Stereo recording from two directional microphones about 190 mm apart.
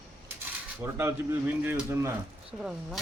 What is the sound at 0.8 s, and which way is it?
Speech, 15° right (ahead or behind).